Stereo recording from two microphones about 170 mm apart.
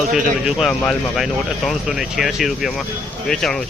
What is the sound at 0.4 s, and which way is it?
Speech, centre (ahead or behind).